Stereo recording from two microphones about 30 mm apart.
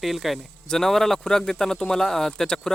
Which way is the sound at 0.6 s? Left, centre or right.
Centre.